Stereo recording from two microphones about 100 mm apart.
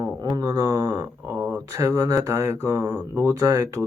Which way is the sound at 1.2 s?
15° right (ahead or behind).